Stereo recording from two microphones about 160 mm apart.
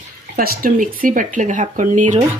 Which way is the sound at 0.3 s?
65° right (ahead or behind).